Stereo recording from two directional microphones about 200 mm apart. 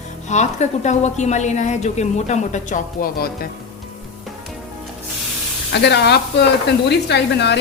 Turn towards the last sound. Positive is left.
turn(degrees=60)  # may be behind; listen again after turning